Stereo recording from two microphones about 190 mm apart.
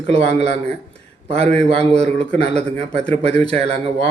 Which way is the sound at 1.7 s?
35° right (ahead or behind).